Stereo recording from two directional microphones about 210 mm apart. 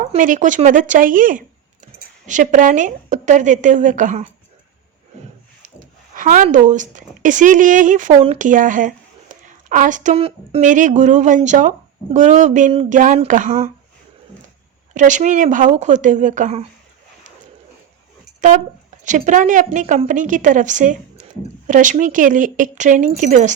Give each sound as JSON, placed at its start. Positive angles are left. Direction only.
{"t": 0.0, "sound": "speech", "side_deg": -40}
{"t": 6.1, "sound": "a woman's voice", "side_deg": -40}
{"t": 14.9, "sound": "a woman's voice", "side_deg": -35}
{"t": 18.3, "sound": "a woman's voice", "side_deg": -35}